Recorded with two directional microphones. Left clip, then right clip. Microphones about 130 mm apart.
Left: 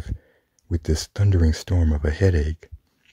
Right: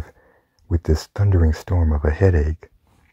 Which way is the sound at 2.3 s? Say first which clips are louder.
Right 3 dB; 40° left (ahead or behind).